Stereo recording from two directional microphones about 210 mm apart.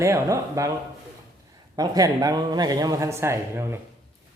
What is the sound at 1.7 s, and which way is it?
Speech, 20° right (ahead or behind).